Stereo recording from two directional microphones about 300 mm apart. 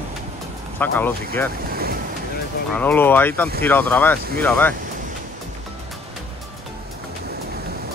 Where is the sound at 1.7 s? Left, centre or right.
Right.